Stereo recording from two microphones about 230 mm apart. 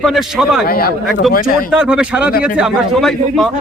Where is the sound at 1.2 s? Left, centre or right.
Centre.